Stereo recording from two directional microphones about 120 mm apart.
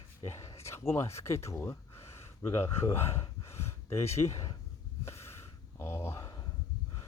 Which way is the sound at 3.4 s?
20° left (ahead or behind).